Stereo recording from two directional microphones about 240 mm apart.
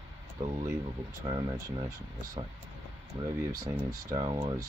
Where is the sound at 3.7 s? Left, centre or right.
Centre.